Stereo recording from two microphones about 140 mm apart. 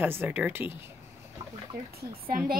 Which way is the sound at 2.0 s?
90° right.